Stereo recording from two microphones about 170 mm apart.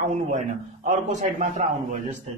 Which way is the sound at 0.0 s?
50° right (ahead or behind).